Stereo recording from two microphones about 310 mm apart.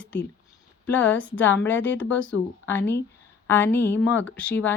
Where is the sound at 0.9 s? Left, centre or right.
Centre.